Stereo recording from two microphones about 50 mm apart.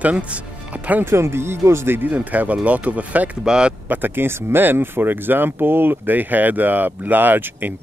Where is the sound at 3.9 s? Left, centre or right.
Right.